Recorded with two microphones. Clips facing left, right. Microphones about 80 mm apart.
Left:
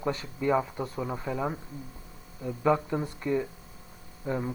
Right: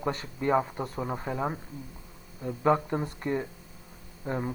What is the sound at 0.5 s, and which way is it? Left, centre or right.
Speech, right.